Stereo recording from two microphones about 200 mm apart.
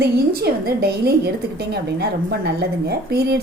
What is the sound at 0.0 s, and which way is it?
A woman's voice, 50° right (ahead or behind).